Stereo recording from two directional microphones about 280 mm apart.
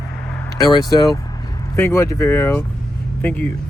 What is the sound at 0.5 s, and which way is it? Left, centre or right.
Speech, centre.